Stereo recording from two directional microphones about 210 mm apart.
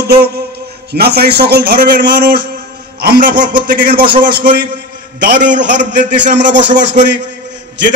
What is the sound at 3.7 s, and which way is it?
Speech, 45° right (ahead or behind).